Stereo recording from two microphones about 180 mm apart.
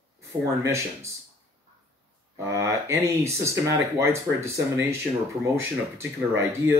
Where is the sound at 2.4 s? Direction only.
15° right (ahead or behind).